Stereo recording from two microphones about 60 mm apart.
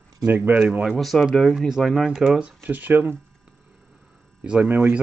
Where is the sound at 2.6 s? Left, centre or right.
Right.